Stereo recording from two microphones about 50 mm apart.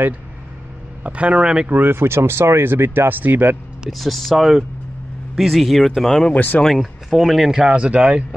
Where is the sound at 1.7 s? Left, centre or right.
Right.